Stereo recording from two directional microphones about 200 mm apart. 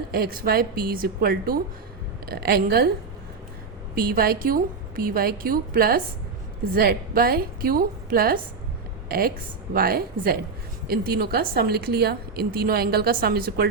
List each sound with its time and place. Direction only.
0.1 s a woman's voice: 50° right (ahead or behind)
3.9 s a woman's voice: 45° right (ahead or behind)